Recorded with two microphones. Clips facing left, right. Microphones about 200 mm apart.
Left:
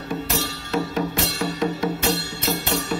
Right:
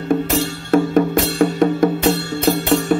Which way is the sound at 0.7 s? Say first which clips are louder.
Right 11 dB; 55° right (ahead or behind).